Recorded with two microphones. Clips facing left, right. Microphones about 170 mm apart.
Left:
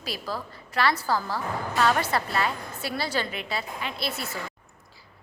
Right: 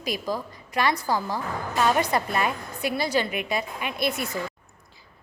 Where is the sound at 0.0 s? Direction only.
15° right (ahead or behind).